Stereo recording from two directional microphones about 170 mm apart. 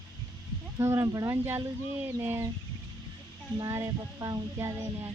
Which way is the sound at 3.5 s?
20° right (ahead or behind).